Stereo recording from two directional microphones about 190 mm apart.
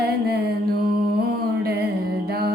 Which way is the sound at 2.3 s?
55° right (ahead or behind).